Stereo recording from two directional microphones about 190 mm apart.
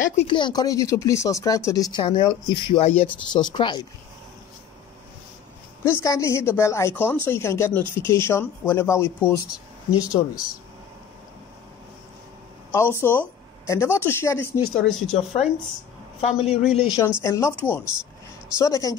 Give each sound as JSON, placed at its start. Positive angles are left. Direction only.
{"t": 0.0, "sound": "speech", "side_deg": 35}
{"t": 5.9, "sound": "a woman's voice", "side_deg": 15}
{"t": 12.7, "sound": "a woman's voice", "side_deg": 10}
{"t": 16.2, "sound": "a man's voice", "side_deg": 35}
{"t": 16.8, "sound": "a woman's voice", "side_deg": 15}